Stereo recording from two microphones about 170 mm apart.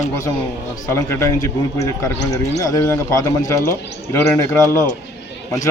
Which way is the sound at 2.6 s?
20° left (ahead or behind).